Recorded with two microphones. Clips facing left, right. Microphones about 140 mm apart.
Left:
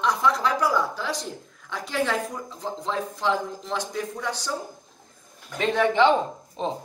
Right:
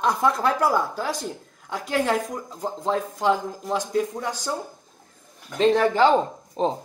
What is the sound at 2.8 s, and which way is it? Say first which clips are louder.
Speech: right 4 dB; 50° right (ahead or behind).